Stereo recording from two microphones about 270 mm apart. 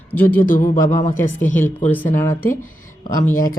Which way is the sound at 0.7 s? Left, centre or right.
Centre.